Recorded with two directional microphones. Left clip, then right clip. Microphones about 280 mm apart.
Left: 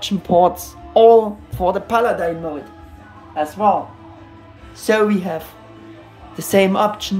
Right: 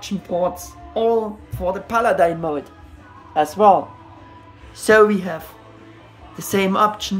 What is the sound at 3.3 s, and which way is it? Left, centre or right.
Speech, right.